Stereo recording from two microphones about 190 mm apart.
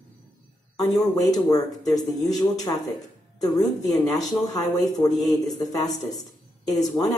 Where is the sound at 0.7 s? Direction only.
20° left (ahead or behind).